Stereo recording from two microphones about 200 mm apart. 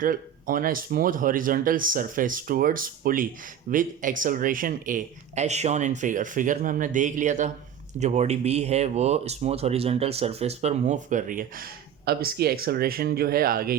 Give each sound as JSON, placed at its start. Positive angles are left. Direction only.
{"t": 0.0, "sound": "speech", "side_deg": -45}